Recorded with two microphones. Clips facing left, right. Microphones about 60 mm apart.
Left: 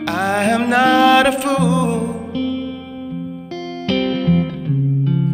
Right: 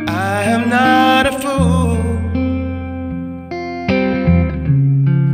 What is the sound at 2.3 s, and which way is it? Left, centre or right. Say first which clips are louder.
Music: right 3 dB; right.